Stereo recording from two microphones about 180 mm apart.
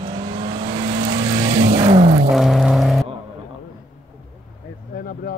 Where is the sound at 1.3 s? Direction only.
25° right (ahead or behind).